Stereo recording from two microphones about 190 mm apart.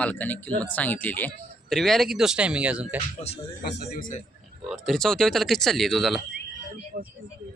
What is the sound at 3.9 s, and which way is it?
Speech, 45° left (ahead or behind).